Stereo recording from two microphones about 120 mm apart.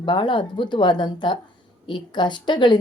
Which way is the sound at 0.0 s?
40° left (ahead or behind).